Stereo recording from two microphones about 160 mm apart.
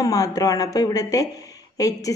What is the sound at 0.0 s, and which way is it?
A woman's voice, 20° left (ahead or behind).